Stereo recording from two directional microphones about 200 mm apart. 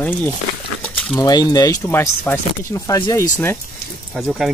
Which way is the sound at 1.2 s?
20° left (ahead or behind).